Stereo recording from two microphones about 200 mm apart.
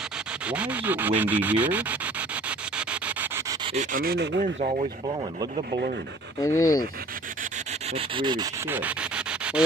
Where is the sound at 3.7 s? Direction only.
45° right (ahead or behind).